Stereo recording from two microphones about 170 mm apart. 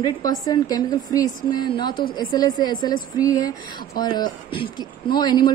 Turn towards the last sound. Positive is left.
turn(degrees=25)  # may be behind; listen again after turning